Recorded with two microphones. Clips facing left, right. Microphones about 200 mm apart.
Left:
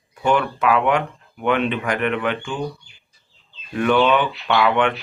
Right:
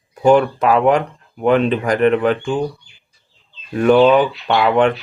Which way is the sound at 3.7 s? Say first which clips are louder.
Right 6 dB; 35° right (ahead or behind).